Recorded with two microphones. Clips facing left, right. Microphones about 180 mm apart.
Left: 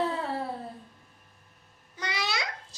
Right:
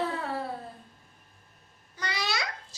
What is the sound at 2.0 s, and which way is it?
Babbling, 20° left (ahead or behind).